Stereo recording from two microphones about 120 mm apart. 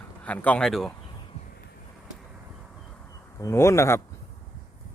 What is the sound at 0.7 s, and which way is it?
Speech, centre (ahead or behind).